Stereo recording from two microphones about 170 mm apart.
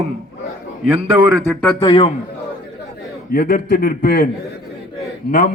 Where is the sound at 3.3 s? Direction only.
60° left (ahead or behind).